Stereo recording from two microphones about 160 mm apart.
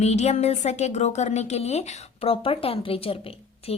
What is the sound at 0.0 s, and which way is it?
A woman's voice, 45° left (ahead or behind).